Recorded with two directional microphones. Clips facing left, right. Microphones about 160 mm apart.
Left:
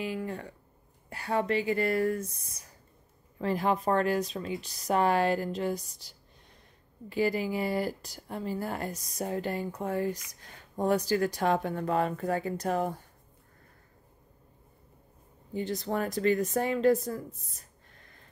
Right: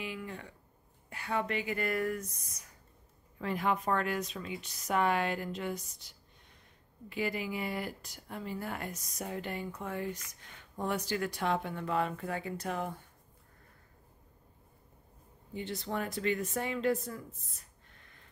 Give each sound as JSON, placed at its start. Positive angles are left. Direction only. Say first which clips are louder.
{"t": 0.0, "sound": "speech", "louder": "left 7 dB", "side_deg": 40}
{"t": 15.5, "sound": "speech", "louder": "left 5 dB", "side_deg": 40}